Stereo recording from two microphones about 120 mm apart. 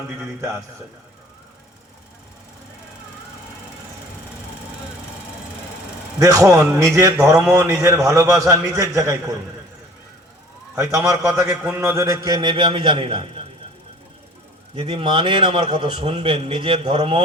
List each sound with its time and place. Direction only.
6.1 s a man's voice: 25° right (ahead or behind)
10.8 s a man's voice: 25° right (ahead or behind); by 13.4 s 50° right (ahead or behind)
14.8 s a man's voice: 50° right (ahead or behind)